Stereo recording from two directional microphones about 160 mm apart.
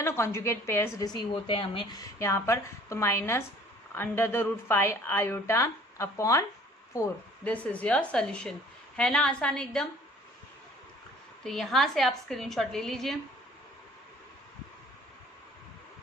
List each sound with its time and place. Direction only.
0.0 s a woman's voice: 15° left (ahead or behind)
11.4 s a woman's voice: centre (ahead or behind)